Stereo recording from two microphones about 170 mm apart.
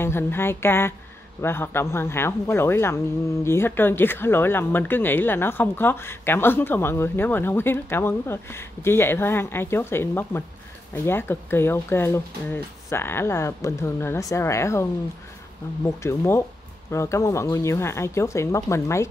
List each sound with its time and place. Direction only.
0.0 s speech: 15° left (ahead or behind)